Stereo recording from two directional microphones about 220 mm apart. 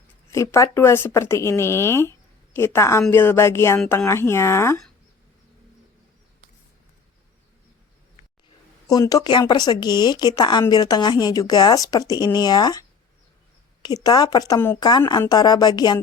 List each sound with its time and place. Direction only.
0.3 s speech: 15° left (ahead or behind)
8.9 s speech: 15° left (ahead or behind)
13.8 s speech: 20° left (ahead or behind)